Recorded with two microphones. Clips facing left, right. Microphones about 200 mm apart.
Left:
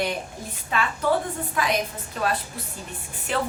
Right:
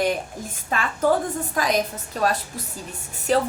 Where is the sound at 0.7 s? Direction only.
45° right (ahead or behind).